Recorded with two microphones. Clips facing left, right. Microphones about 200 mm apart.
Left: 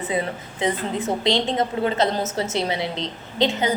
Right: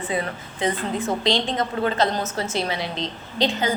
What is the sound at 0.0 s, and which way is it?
A woman's voice, 20° left (ahead or behind).